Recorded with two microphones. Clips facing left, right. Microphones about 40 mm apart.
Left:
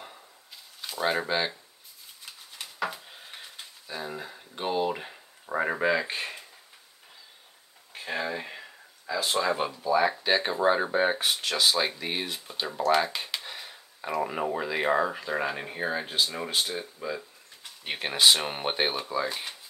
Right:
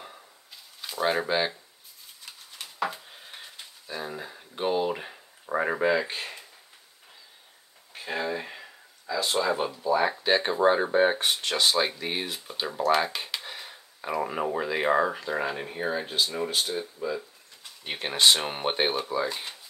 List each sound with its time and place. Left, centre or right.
0.7 s speech: centre
3.8 s speech: centre
8.1 s speech: centre
9.0 s speech: centre
9.8 s speech: centre
15.2 s speech: centre